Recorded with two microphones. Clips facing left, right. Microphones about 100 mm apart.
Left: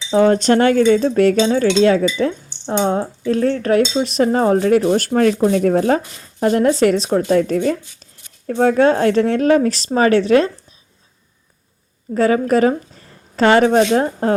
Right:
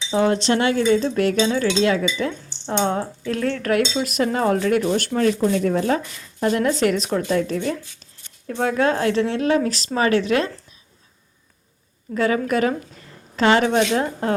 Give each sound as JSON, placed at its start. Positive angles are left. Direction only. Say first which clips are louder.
{"t": 0.3, "sound": "cutlery", "louder": "left 6 dB", "side_deg": 45}
{"t": 0.9, "sound": "speech", "louder": "left 5 dB", "side_deg": 45}
{"t": 2.8, "sound": "speech", "louder": "left 6 dB", "side_deg": 25}
{"t": 12.1, "sound": "speech", "louder": "left 5 dB", "side_deg": 35}